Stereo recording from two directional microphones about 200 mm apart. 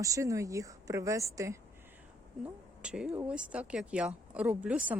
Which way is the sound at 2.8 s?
5° right (ahead or behind).